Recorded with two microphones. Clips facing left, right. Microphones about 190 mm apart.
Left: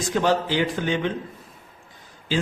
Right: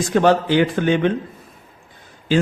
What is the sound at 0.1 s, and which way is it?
Speech, 60° right (ahead or behind).